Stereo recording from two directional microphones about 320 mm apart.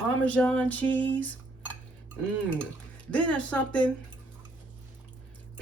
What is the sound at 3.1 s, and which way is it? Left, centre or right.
Speech, centre.